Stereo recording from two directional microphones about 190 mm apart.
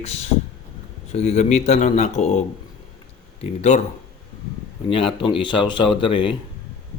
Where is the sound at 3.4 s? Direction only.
40° left (ahead or behind).